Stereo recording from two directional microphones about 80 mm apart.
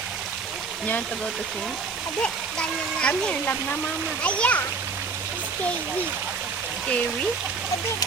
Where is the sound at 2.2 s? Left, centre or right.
Centre.